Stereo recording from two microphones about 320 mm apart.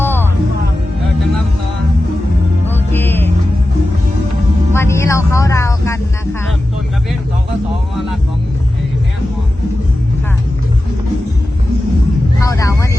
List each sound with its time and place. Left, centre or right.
0.0 s music: centre
2.6 s music: centre
4.7 s music: centre
12.4 s vehicle: centre